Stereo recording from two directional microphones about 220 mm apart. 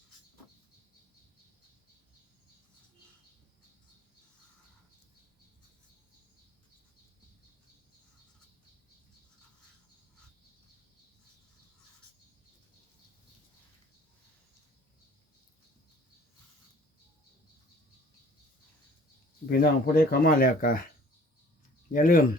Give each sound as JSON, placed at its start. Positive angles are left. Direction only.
{"t": 19.5, "sound": "speech", "side_deg": 45}
{"t": 21.9, "sound": "speech", "side_deg": 40}